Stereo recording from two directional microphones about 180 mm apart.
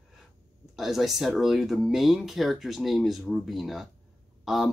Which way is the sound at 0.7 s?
Centre (ahead or behind).